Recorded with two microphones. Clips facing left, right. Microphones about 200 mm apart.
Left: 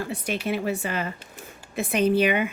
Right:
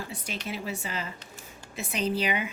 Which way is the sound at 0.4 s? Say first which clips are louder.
Left 8 dB; 60° left (ahead or behind).